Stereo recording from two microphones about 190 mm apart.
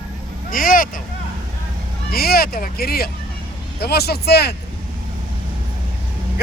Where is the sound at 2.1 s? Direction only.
55° left (ahead or behind).